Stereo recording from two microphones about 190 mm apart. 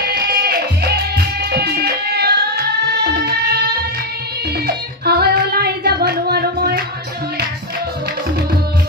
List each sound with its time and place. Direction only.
0.1 s music: 55° right (ahead or behind)
4.6 s child singing: 55° right (ahead or behind)